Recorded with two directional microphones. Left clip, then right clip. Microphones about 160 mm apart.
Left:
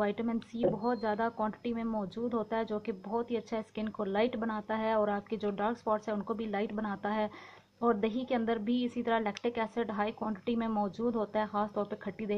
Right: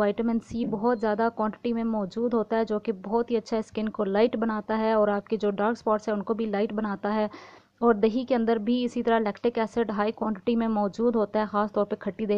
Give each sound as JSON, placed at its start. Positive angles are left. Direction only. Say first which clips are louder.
{"t": 0.0, "sound": "speech", "louder": "right 7 dB", "side_deg": -35}